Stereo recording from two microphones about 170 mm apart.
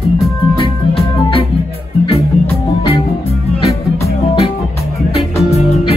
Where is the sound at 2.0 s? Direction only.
35° left (ahead or behind).